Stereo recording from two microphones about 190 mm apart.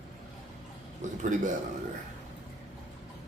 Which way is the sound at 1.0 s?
40° right (ahead or behind).